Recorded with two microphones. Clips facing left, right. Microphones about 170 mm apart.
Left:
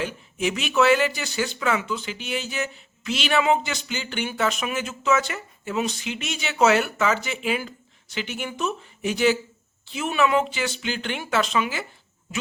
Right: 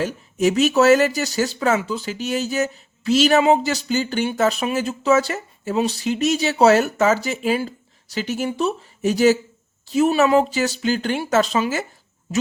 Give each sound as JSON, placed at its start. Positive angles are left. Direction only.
{"t": 0.0, "sound": "speech", "side_deg": -40}